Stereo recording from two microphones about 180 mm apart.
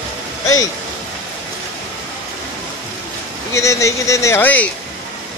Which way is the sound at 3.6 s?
15° left (ahead or behind).